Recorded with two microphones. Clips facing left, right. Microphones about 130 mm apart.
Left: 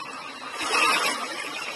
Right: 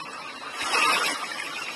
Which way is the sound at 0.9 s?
65° left (ahead or behind).